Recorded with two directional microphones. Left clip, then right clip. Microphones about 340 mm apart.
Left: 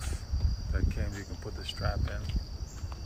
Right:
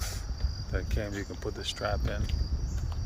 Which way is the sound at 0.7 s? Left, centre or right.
Centre.